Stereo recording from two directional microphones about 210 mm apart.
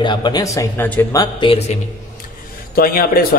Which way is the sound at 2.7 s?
45° left (ahead or behind).